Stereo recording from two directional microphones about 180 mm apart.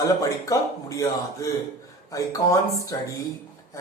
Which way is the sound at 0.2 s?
15° left (ahead or behind).